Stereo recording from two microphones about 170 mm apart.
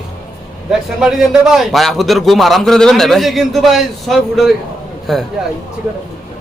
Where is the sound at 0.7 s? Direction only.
Centre (ahead or behind).